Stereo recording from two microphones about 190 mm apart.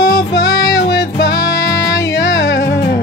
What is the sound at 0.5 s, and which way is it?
Music, 15° left (ahead or behind).